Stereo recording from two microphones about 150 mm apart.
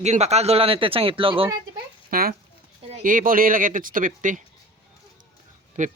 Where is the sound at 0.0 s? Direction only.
45° right (ahead or behind).